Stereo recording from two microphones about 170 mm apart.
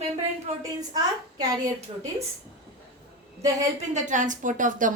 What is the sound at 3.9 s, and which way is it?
A woman's voice, 45° right (ahead or behind).